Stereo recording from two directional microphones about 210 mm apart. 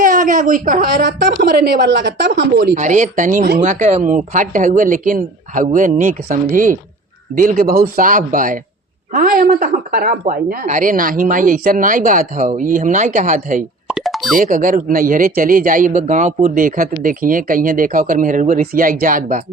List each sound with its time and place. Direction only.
0.0 s a woman's voice: 40° right (ahead or behind)
2.7 s speech: 35° right (ahead or behind)
13.8 s plop: centre (ahead or behind)
14.3 s speech: 40° right (ahead or behind)